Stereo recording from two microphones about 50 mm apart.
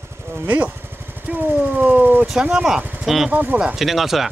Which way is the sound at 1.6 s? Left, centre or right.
Right.